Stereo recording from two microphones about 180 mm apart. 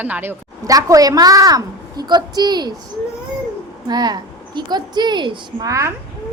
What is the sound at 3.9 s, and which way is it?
A woman's voice, 20° right (ahead or behind).